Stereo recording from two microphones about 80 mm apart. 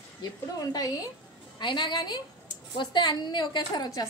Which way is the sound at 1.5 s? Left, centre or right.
Left.